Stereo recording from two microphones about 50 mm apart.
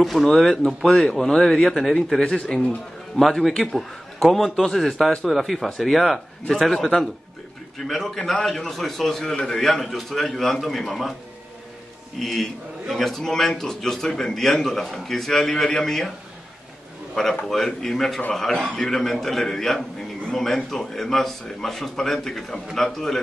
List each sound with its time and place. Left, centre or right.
0.0 s speech: centre
0.3 s a man's voice: centre
3.4 s a man's voice: centre
12.2 s a man's voice: centre
17.1 s a man's voice: centre